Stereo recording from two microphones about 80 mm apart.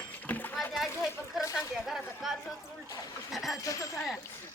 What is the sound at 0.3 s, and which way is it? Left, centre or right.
Splash, left.